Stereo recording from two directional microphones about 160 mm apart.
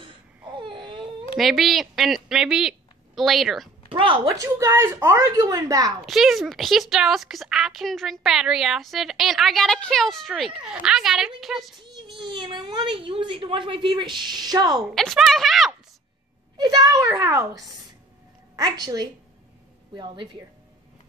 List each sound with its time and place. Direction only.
0.0 s baby cry: 30° right (ahead or behind)
1.3 s a woman's voice: centre (ahead or behind)
3.9 s speech: 30° right (ahead or behind)
4.3 s a child's voice: 20° right (ahead or behind)
6.0 s a woman's voice: centre (ahead or behind)
11.8 s a child's voice: 30° right (ahead or behind)
14.8 s a woman's voice: centre (ahead or behind)
16.5 s a child's voice: 25° right (ahead or behind)